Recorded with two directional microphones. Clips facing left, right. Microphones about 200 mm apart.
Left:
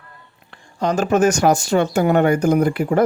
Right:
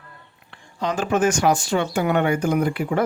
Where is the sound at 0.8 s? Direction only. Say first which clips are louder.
Left 4 dB; 40° left (ahead or behind).